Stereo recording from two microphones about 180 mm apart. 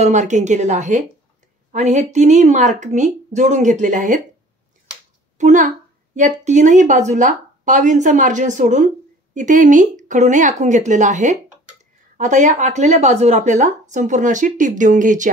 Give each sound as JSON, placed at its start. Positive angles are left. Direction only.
{"t": 0.0, "sound": "a woman's voice", "side_deg": -40}
{"t": 5.4, "sound": "speech", "side_deg": -45}